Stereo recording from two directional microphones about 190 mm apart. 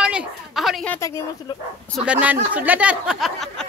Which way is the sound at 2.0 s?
5° right (ahead or behind).